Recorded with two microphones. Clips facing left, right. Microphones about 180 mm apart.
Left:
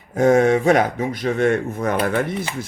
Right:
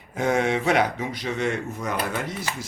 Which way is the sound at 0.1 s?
45° left (ahead or behind).